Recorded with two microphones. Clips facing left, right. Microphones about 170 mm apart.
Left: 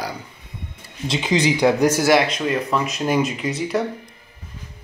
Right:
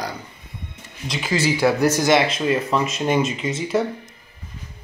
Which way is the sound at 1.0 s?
25° left (ahead or behind).